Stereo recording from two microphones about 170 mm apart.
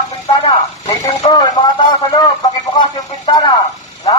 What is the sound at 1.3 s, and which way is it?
Speech, 25° left (ahead or behind).